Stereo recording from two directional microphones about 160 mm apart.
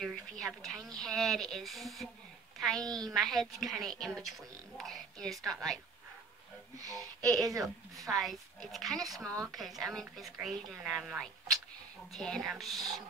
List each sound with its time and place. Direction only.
0.0 s a woman's voice: centre (ahead or behind)
6.8 s speech: 20° right (ahead or behind)
7.6 s a woman's voice: centre (ahead or behind)